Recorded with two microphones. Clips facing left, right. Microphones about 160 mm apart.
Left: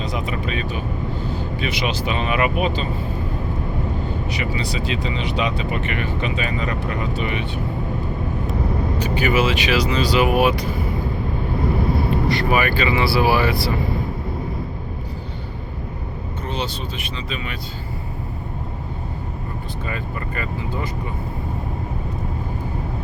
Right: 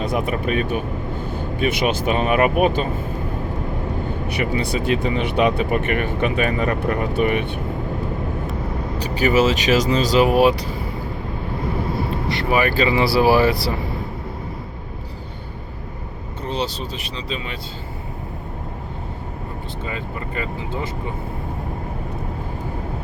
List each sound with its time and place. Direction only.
0.0 s speech: 55° right (ahead or behind)
4.3 s speech: 55° right (ahead or behind)
9.0 s speech: 35° right (ahead or behind)
12.3 s speech: 25° right (ahead or behind)
12.7 s speech: 35° right (ahead or behind)
16.5 s speech: 35° right (ahead or behind)
19.9 s speech: 20° right (ahead or behind)